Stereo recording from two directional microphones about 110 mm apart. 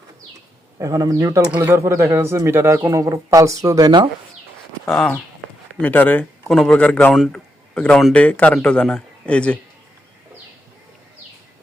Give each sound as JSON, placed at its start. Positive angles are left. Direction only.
{"t": 0.8, "sound": "a man's voice", "side_deg": -30}
{"t": 1.5, "sound": "speech", "side_deg": -20}
{"t": 4.9, "sound": "speech", "side_deg": 5}
{"t": 7.3, "sound": "a sound", "side_deg": 10}
{"t": 8.1, "sound": "speech", "side_deg": 10}